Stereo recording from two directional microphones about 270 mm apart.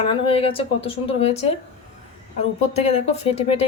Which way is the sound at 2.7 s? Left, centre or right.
Left.